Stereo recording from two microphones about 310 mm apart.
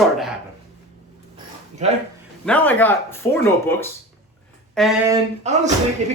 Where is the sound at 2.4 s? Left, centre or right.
Centre.